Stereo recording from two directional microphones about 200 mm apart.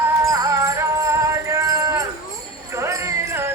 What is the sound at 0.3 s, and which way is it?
Music, 15° right (ahead or behind).